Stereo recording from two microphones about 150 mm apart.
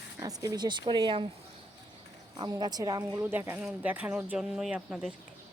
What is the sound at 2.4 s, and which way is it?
Speech, 25° right (ahead or behind).